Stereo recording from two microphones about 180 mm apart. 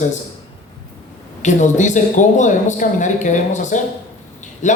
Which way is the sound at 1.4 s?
40° left (ahead or behind).